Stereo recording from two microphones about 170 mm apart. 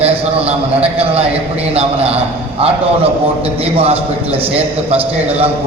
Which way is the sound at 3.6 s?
35° right (ahead or behind).